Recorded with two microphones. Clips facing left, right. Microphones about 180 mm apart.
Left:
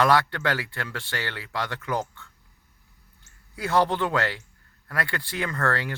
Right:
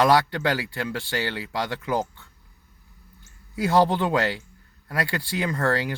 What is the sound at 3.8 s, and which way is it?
Speech, 15° right (ahead or behind).